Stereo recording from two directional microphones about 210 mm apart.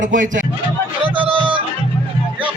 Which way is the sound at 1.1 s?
25° right (ahead or behind).